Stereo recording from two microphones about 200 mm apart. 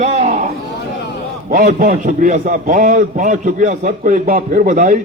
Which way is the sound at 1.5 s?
45° right (ahead or behind).